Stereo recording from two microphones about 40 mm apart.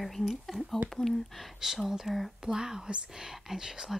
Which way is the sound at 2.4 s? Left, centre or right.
Centre.